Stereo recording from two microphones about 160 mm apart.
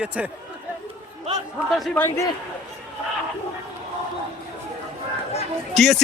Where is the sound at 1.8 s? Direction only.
Centre (ahead or behind).